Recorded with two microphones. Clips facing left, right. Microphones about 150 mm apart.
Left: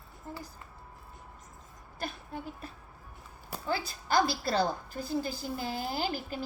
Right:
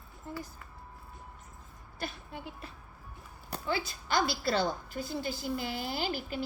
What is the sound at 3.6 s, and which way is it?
A woman's voice, 40° left (ahead or behind).